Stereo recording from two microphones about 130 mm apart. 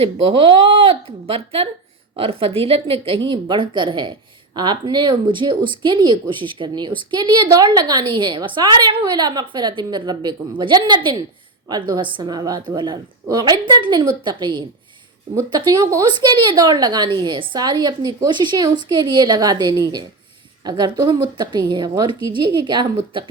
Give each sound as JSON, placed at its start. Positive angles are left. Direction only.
{"t": 0.0, "sound": "a woman's voice", "side_deg": -40}